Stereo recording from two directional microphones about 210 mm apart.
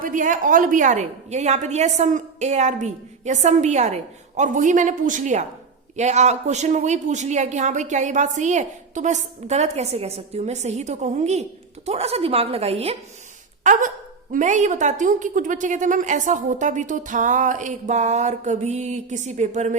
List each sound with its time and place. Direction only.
0.0 s a woman's voice: 40° right (ahead or behind)
13.7 s a woman's voice: 40° right (ahead or behind)